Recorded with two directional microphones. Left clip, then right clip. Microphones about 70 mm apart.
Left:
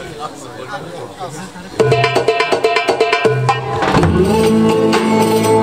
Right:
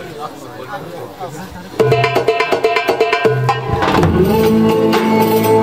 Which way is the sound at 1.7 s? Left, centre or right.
Centre.